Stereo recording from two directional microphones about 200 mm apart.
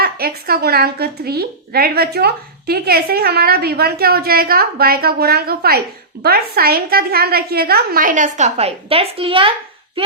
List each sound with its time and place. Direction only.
0.0 s a woman's voice: 50° right (ahead or behind); by 10.0 s 25° right (ahead or behind)